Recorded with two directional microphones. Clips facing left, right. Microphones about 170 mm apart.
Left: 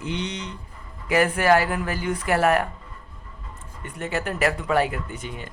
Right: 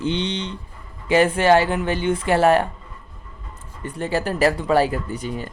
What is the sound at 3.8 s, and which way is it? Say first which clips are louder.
Speech: right 5 dB; 30° right (ahead or behind).